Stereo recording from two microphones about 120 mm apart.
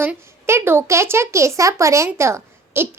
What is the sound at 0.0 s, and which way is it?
Speech, 20° right (ahead or behind).